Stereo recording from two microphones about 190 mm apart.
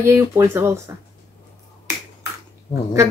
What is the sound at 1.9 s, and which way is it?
Finger snapping, 15° right (ahead or behind).